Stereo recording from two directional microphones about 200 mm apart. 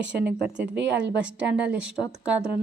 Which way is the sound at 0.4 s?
5° right (ahead or behind).